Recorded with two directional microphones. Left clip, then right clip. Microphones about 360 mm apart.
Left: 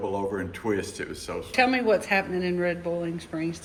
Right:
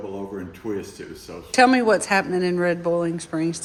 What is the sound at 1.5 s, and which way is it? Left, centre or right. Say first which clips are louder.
A woman's voice: right 6 dB; centre.